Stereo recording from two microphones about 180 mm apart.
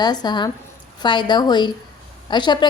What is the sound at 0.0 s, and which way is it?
A woman's voice, 25° left (ahead or behind).